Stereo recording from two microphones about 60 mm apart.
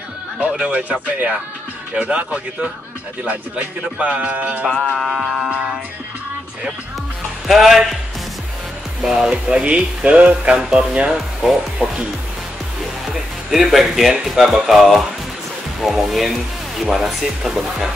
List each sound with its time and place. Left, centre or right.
0.4 s speech: right
2.0 s speech: right
4.7 s speech: centre
5.5 s speech: right
7.4 s speech: centre
9.0 s speech: centre
11.1 s speech: centre
13.0 s music: centre
14.2 s speech: centre